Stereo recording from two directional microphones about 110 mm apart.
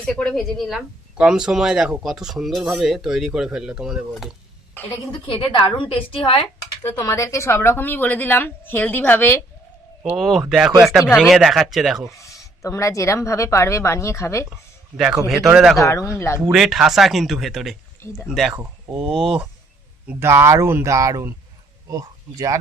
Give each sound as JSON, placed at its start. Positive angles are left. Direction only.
{"t": 0.0, "sound": "speech", "side_deg": 5}
{"t": 4.9, "sound": "a woman's voice", "side_deg": 55}
{"t": 7.0, "sound": "a woman's voice", "side_deg": 30}
{"t": 10.2, "sound": "speech", "side_deg": 0}
{"t": 12.1, "sound": "a woman's voice", "side_deg": 30}
{"t": 14.9, "sound": "speech", "side_deg": -5}
{"t": 15.8, "sound": "a woman's voice", "side_deg": 30}
{"t": 16.4, "sound": "speech", "side_deg": -5}
{"t": 20.1, "sound": "speech", "side_deg": -20}